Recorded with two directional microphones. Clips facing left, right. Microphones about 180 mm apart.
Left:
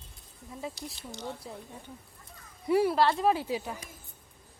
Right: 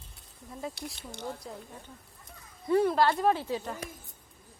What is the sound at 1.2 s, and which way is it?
Speech, centre (ahead or behind).